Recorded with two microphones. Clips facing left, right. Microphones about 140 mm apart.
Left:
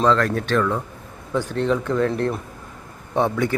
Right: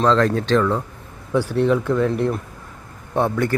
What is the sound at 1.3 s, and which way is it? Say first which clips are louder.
Speech: right 3 dB; 10° right (ahead or behind).